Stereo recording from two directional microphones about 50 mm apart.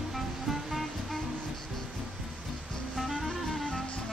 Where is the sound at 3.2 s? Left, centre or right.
Centre.